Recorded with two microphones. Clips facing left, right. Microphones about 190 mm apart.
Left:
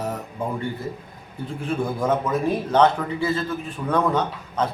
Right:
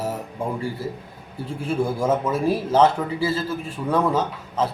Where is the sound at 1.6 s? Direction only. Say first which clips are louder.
Right 2 dB; 5° right (ahead or behind).